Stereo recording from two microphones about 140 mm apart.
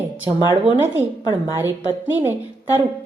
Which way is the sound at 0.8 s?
15° right (ahead or behind).